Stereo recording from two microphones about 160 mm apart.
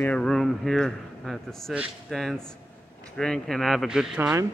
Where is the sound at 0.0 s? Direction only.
5° left (ahead or behind).